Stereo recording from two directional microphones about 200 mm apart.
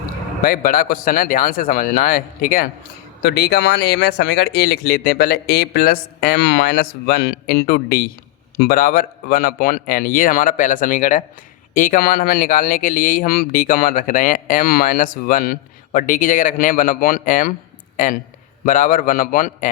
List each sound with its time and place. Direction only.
0.4 s speech: 45° left (ahead or behind)